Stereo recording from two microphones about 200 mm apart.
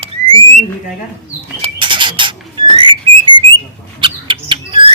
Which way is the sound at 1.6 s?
25° right (ahead or behind).